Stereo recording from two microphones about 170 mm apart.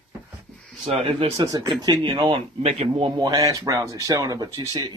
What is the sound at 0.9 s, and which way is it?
Speech, 35° right (ahead or behind).